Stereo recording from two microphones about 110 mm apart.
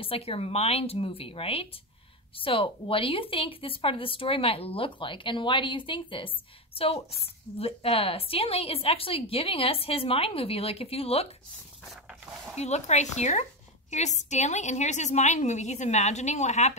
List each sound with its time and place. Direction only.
0.0 s a woman's voice: 60° left (ahead or behind)
11.9 s dog: centre (ahead or behind)
12.5 s a woman's voice: 90° left